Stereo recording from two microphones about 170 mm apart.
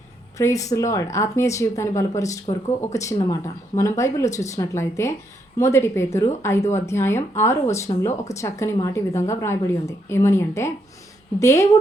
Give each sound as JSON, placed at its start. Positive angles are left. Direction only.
{"t": 0.3, "sound": "a woman's voice", "side_deg": 20}